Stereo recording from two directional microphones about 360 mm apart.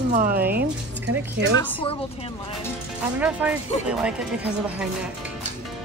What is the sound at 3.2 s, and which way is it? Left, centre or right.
Speech, centre.